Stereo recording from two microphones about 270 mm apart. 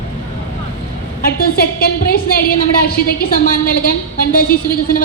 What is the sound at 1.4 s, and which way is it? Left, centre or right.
A woman's voice, left.